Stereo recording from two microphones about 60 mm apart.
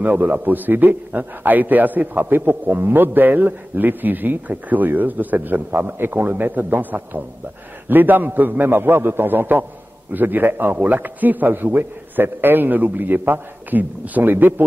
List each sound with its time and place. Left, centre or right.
0.0 s a man's voice: right